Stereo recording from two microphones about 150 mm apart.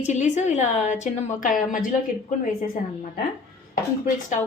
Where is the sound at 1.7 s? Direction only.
65° left (ahead or behind).